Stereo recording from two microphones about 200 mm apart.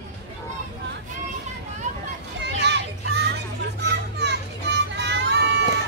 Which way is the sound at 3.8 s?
60° right (ahead or behind).